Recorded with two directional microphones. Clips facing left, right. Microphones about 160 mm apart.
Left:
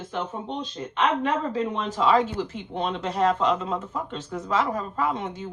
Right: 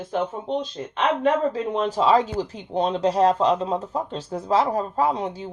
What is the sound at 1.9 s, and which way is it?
Speech, 35° right (ahead or behind).